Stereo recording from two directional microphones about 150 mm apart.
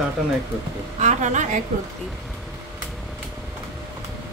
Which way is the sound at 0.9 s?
50° right (ahead or behind).